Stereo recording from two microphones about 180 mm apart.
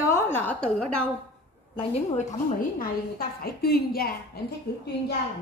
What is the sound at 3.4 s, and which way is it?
Speech, 60° left (ahead or behind).